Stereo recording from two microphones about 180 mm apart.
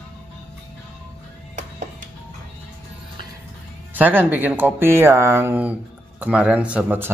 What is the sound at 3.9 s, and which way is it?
Speech, 10° right (ahead or behind).